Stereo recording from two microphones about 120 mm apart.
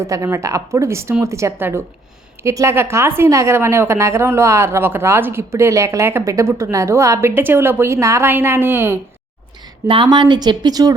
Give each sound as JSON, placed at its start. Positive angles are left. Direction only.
{"t": 0.0, "sound": "a woman's voice", "side_deg": -25}
{"t": 9.8, "sound": "speech", "side_deg": -45}